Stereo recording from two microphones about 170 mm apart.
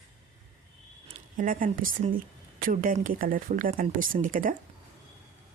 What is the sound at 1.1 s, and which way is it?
Speech, 50° right (ahead or behind).